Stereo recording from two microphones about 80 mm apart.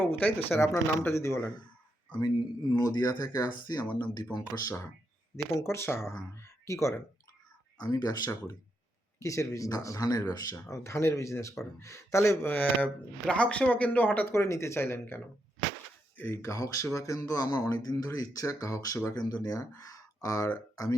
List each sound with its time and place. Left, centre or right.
0.0 s speech: left
0.6 s speech: left
2.7 s speech: left
5.5 s speech: left
7.8 s speech: left
9.1 s speech: left
10.7 s speech: left
12.4 s speech: left
14.3 s speech: left
19.1 s speech: left
19.4 s speech: left